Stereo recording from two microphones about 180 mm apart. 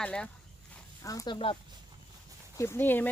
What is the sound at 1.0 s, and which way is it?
Speech, 20° left (ahead or behind).